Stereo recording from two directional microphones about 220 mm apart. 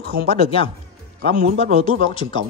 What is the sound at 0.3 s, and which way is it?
Speech, 25° left (ahead or behind).